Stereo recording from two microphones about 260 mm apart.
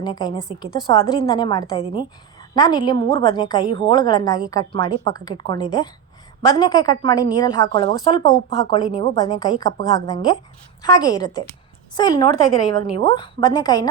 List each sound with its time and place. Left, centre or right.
0.0 s speech: centre